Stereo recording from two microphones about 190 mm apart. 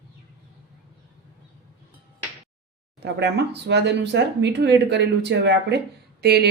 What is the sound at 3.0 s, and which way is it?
Speech, 60° right (ahead or behind).